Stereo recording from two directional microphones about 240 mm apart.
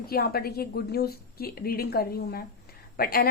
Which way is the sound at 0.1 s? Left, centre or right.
Left.